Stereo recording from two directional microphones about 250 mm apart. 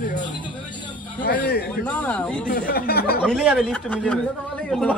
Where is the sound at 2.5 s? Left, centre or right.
Left.